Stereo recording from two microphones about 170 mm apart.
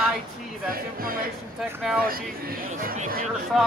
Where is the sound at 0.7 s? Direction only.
60° right (ahead or behind).